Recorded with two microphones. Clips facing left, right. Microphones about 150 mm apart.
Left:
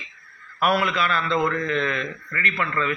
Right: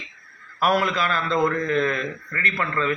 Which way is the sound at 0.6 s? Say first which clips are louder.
Right 1 dB; 40° right (ahead or behind).